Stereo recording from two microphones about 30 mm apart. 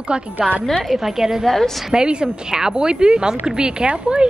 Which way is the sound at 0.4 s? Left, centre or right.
Right.